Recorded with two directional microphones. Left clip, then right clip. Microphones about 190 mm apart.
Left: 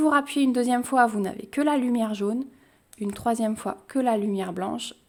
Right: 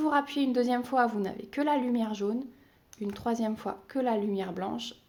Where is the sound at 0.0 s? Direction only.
30° left (ahead or behind).